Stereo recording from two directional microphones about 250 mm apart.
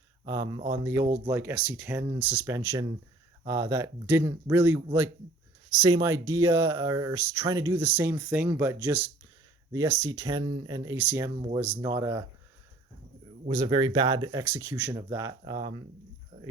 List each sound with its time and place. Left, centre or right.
0.3 s speech: centre
13.5 s speech: centre
16.3 s a sound: right